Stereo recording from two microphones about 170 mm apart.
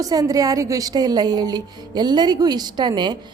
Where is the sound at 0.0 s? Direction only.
20° right (ahead or behind).